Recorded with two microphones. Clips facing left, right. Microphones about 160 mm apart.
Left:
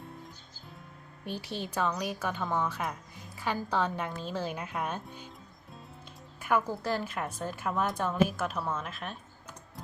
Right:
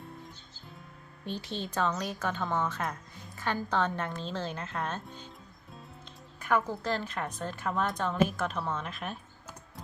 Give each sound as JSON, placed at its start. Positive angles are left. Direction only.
{"t": 1.2, "sound": "a woman's voice", "side_deg": 10}
{"t": 5.0, "sound": "music", "side_deg": 10}
{"t": 6.4, "sound": "a woman's voice", "side_deg": 10}